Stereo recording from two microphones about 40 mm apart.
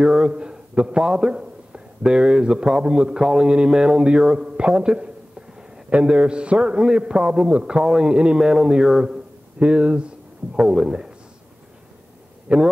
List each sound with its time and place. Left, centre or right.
0.0 s a man's voice: centre
9.6 s speech: right
10.6 s speech: centre
12.5 s a man's voice: right